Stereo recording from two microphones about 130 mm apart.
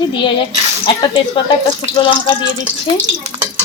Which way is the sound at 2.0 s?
40° left (ahead or behind).